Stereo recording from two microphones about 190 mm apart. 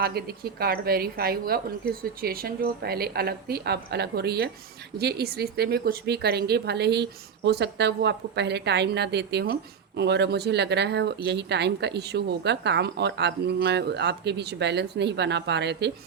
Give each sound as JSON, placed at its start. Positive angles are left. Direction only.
{"t": 0.0, "sound": "speech", "side_deg": -55}